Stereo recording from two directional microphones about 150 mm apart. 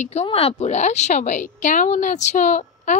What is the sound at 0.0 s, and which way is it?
A woman's voice, 45° left (ahead or behind).